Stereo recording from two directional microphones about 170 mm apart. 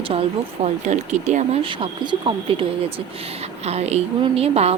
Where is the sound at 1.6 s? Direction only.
30° right (ahead or behind).